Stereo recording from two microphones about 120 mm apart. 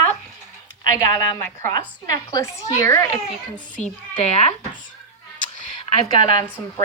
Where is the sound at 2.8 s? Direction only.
25° left (ahead or behind).